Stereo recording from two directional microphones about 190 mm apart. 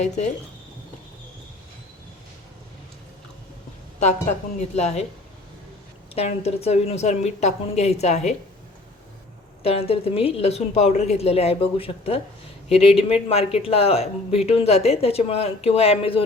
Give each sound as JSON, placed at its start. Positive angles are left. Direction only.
{"t": 0.0, "sound": "speech", "side_deg": 40}
{"t": 4.6, "sound": "speech", "side_deg": 35}
{"t": 6.1, "sound": "speech", "side_deg": 35}
{"t": 9.6, "sound": "speech", "side_deg": 30}